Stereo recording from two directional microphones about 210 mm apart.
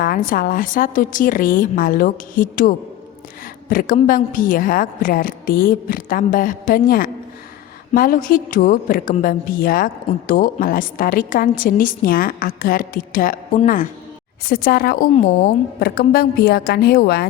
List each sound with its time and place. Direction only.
0.0 s a woman's voice: 40° left (ahead or behind)